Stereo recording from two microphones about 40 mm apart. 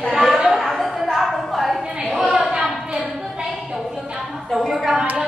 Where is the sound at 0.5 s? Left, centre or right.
Centre.